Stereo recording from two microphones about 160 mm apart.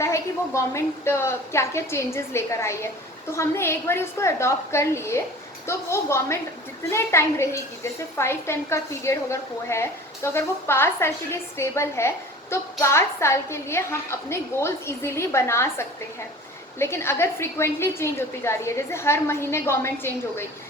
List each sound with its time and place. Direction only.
0.0 s a woman's voice: 20° left (ahead or behind)